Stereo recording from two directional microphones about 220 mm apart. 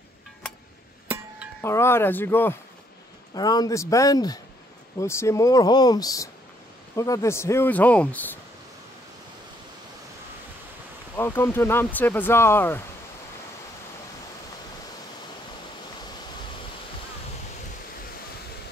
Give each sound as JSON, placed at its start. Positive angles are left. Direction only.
{"t": 1.6, "sound": "speech", "side_deg": 10}
{"t": 11.1, "sound": "speech", "side_deg": 10}